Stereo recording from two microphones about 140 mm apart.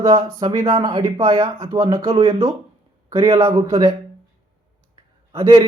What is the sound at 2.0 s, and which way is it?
Speech, 45° right (ahead or behind).